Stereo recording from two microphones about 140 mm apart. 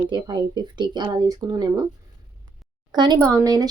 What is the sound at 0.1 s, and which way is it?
Speech, 35° right (ahead or behind).